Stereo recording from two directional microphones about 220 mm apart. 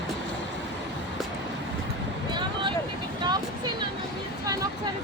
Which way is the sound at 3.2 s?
20° right (ahead or behind).